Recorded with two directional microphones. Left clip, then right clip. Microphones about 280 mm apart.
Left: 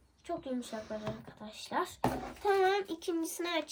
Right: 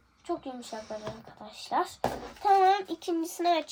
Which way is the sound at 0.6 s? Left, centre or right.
Centre.